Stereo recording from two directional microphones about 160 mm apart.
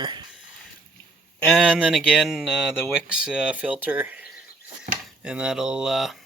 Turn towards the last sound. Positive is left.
turn(degrees=0)  # may be behind; listen again after turning